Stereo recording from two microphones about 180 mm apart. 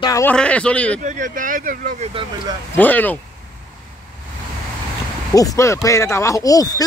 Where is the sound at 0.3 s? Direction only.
5° left (ahead or behind).